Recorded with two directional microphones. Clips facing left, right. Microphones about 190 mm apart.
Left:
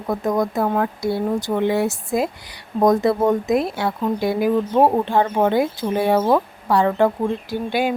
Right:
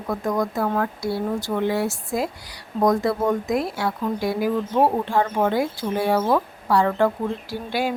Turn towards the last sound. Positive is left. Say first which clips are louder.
# left 4 dB
turn(degrees=20)  # may be behind; listen again after turning